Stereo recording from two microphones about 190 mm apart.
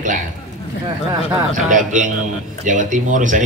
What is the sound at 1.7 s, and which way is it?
A man's voice, 40° right (ahead or behind).